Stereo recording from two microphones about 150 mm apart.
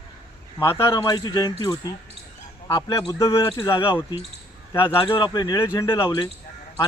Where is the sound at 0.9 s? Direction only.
25° left (ahead or behind).